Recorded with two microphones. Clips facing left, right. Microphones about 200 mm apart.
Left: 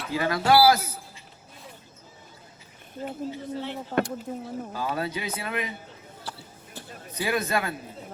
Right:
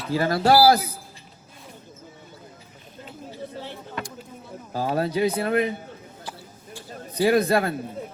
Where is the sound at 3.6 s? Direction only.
65° left (ahead or behind).